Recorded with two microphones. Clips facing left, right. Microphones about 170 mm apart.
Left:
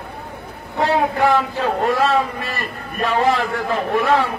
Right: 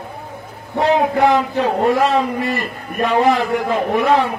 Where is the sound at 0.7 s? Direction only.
20° right (ahead or behind).